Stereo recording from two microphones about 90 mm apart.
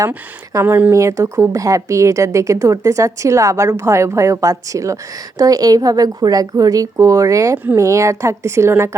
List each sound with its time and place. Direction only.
0.6 s speech: 25° right (ahead or behind)
0.9 s a woman's voice: 35° right (ahead or behind)